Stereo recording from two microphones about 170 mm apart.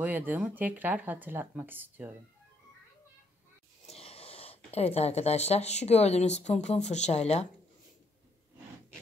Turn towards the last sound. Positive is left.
turn(degrees=40)  # may be behind; listen again after turning